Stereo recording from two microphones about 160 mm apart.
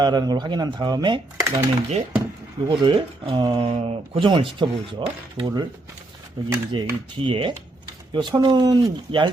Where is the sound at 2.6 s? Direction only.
30° right (ahead or behind).